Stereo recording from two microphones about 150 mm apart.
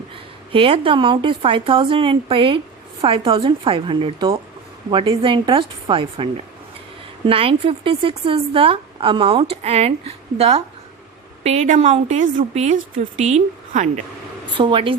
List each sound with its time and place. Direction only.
0.5 s speech: 35° right (ahead or behind)
7.3 s a woman's voice: 35° right (ahead or behind); by 14.0 s 55° right (ahead or behind)
14.6 s speech: 35° right (ahead or behind)